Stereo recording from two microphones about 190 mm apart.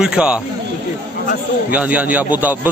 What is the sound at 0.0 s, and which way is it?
Speech, 5° right (ahead or behind).